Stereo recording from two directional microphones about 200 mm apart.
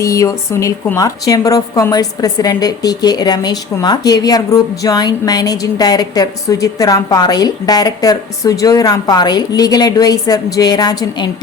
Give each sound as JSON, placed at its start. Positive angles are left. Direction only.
{"t": 0.0, "sound": "a woman's voice", "side_deg": 15}